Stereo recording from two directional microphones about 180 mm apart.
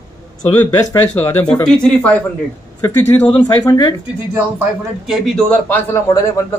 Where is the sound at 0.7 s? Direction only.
10° left (ahead or behind).